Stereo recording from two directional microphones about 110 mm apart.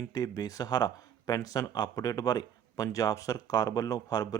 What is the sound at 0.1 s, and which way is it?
Speech, 35° left (ahead or behind).